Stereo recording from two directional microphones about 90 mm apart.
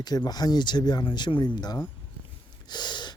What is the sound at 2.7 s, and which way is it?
Gasp, 55° left (ahead or behind).